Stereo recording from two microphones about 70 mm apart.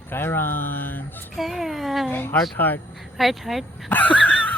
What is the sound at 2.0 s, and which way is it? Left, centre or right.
Speech, left.